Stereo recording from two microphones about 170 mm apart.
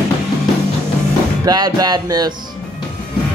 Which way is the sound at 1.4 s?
25° right (ahead or behind).